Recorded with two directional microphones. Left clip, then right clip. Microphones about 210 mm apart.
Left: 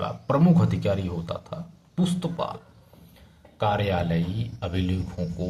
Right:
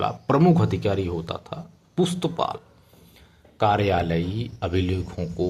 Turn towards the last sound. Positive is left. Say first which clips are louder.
# right 5 dB
turn(degrees=-30)  # may be behind; listen again after turning